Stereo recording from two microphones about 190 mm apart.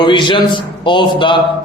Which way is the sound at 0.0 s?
25° left (ahead or behind).